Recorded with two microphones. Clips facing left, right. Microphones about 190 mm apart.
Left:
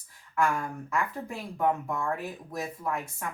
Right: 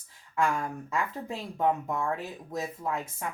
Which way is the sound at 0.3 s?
20° right (ahead or behind).